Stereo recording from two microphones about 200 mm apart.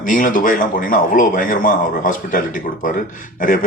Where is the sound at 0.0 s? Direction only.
40° left (ahead or behind).